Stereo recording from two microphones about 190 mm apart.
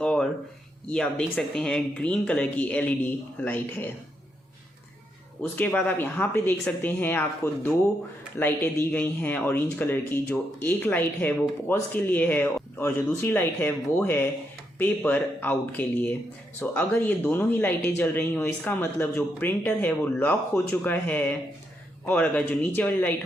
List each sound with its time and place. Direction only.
0.0 s a sound: 5° left (ahead or behind)
0.9 s speech: 5° left (ahead or behind)
5.4 s speech: 5° left (ahead or behind)